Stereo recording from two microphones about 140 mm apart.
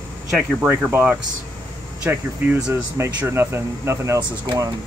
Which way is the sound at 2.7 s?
20° right (ahead or behind).